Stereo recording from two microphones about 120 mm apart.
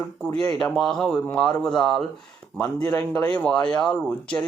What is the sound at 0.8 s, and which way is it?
Speech, 5° left (ahead or behind).